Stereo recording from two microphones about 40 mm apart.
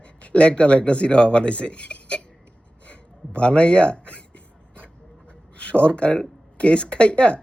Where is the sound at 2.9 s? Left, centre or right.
Left.